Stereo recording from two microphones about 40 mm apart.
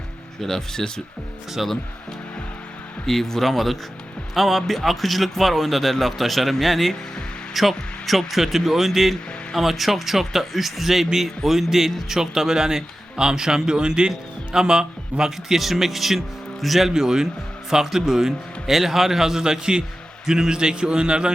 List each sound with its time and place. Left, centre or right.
0.4 s speech: centre
1.5 s speech: centre
3.1 s a man's voice: centre
16.9 s a man's voice: centre